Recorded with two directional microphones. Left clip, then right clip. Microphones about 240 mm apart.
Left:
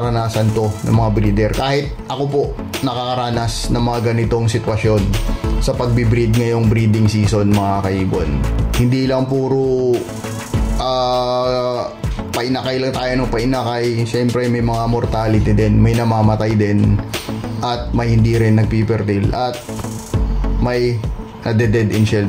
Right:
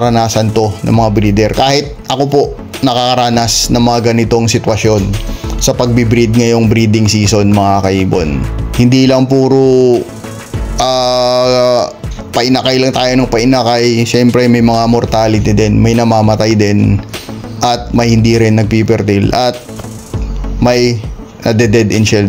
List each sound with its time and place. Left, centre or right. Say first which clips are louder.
0.0 s speech: right 8 dB; right
10.8 s music: right 7 dB; right
12.4 s speech: right 9 dB; right
20.6 s speech: right 8 dB; right